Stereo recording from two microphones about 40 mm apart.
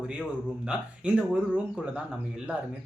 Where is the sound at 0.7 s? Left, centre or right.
Right.